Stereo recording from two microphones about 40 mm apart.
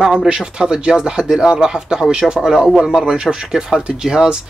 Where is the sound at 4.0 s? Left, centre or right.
Right.